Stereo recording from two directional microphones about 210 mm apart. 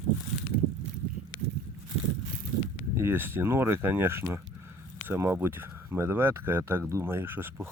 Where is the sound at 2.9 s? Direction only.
10° right (ahead or behind).